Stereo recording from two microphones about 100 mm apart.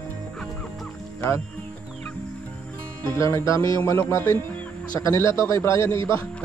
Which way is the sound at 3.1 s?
30° left (ahead or behind).